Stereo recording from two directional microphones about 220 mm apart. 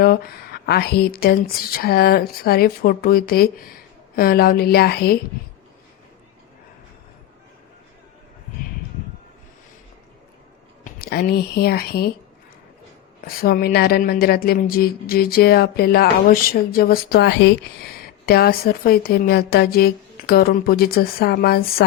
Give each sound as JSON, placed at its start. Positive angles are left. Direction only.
{"t": 0.0, "sound": "speech", "side_deg": 45}
{"t": 10.8, "sound": "speech", "side_deg": 40}
{"t": 13.2, "sound": "speech", "side_deg": 45}